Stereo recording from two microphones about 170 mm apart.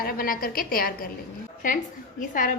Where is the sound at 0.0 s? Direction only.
60° left (ahead or behind).